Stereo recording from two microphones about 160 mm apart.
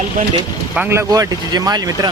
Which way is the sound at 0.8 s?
15° right (ahead or behind).